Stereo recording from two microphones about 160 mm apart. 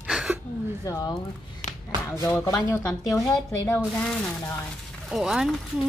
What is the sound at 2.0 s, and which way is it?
Speech, 15° left (ahead or behind).